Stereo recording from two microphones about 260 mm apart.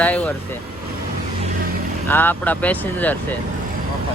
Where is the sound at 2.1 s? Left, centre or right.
Centre.